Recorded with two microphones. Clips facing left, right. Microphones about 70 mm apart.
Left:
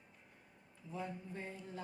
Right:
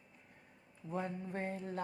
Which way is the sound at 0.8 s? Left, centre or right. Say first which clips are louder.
Right 5 dB; right.